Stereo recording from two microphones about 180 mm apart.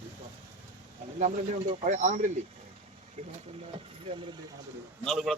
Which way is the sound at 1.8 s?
40° right (ahead or behind).